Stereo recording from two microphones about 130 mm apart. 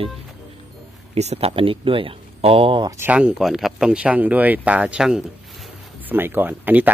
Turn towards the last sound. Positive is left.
turn(degrees=-15)  # may be behind; listen again after turning